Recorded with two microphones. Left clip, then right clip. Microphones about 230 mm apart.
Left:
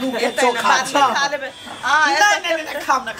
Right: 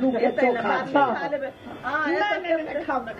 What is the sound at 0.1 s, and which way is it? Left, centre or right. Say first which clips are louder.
A man's voice: left 7 dB; left.